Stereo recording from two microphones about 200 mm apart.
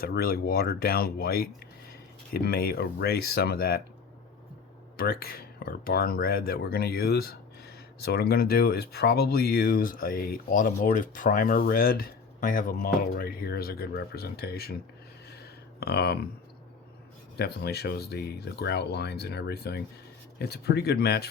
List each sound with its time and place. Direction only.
0.0 s speech: 50° left (ahead or behind)
4.9 s speech: 50° left (ahead or behind)
15.8 s speech: 55° left (ahead or behind)
17.3 s speech: 55° left (ahead or behind)